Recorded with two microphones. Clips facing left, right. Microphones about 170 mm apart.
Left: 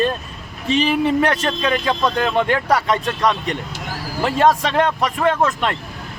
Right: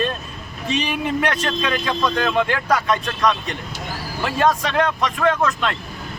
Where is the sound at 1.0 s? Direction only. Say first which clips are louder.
Left 4 dB; 30° left (ahead or behind).